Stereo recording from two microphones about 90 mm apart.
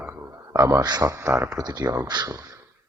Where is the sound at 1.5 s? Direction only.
45° right (ahead or behind).